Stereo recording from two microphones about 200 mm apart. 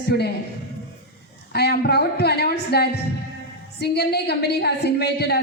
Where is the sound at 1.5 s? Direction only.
55° left (ahead or behind).